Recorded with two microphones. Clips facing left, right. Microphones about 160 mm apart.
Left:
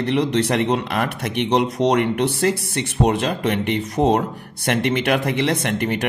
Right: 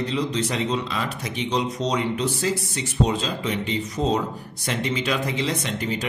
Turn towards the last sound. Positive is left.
turn(degrees=60)  # may be behind; listen again after turning